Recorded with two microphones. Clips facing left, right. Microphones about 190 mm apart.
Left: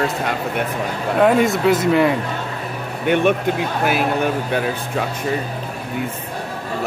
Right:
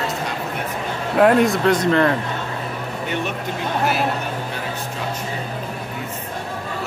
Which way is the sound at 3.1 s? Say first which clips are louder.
Left 11 dB; 60° left (ahead or behind).